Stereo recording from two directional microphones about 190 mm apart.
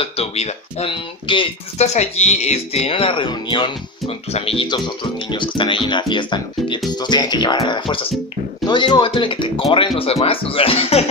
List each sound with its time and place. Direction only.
0.0 s speech: 35° left (ahead or behind)